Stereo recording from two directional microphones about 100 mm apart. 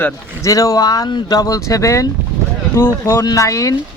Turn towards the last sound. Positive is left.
turn(degrees=35)  # may be behind; listen again after turning